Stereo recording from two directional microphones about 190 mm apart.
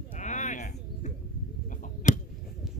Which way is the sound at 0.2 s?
40° left (ahead or behind).